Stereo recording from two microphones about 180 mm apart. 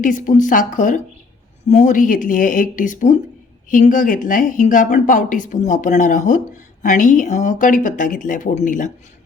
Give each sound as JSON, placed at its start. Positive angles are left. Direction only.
{"t": 0.0, "sound": "speech", "side_deg": 45}